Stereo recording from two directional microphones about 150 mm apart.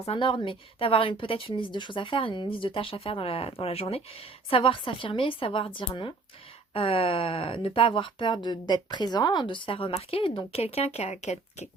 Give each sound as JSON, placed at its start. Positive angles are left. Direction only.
{"t": 0.0, "sound": "speech", "side_deg": 40}